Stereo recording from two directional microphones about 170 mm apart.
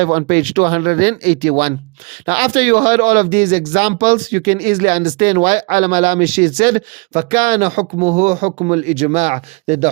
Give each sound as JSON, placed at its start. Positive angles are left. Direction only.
{"t": 0.0, "sound": "speech", "side_deg": -40}
{"t": 2.4, "sound": "speech", "side_deg": -55}